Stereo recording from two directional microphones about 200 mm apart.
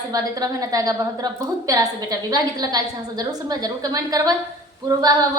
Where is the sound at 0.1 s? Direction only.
15° right (ahead or behind).